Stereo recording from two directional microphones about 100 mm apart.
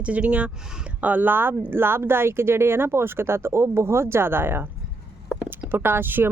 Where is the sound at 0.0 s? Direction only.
15° right (ahead or behind).